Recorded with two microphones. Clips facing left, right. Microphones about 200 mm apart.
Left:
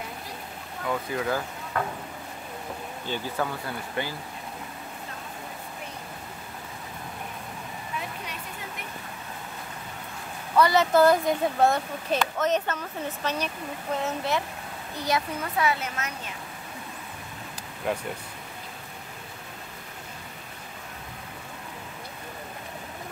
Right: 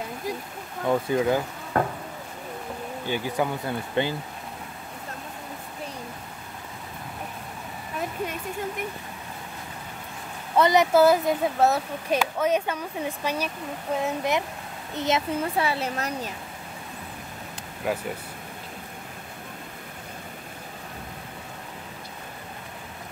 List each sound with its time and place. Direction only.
0.8 s speech: 25° right (ahead or behind)
1.7 s a sound: 45° right (ahead or behind)
3.1 s speech: 15° right (ahead or behind)
10.5 s speech: 20° right (ahead or behind)
17.8 s speech: 5° right (ahead or behind)